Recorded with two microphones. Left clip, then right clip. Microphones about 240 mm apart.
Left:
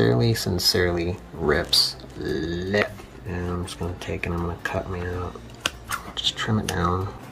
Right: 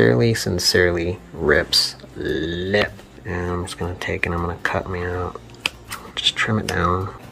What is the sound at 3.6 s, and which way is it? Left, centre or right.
Speech, centre.